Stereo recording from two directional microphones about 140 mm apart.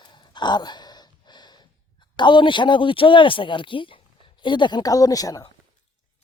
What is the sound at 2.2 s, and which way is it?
Speech, 35° left (ahead or behind).